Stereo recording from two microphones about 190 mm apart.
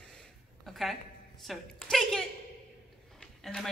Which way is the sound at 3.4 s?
Centre (ahead or behind).